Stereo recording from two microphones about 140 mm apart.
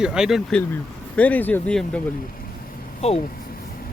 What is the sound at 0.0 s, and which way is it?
Speech, 5° right (ahead or behind).